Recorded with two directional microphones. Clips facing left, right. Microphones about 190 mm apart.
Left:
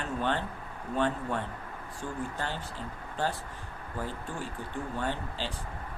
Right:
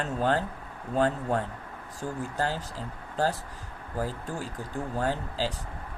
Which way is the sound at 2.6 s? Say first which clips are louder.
Right 2 dB; 40° right (ahead or behind).